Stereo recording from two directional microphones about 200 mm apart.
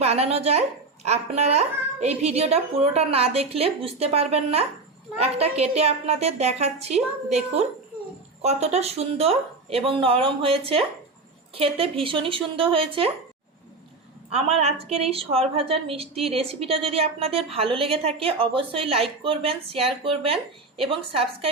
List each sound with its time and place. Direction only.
0.0 s a woman's voice: 30° right (ahead or behind)
14.3 s a woman's voice: 30° right (ahead or behind)